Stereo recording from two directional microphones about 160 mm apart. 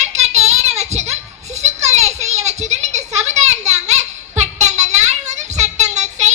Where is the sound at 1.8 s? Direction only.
45° right (ahead or behind).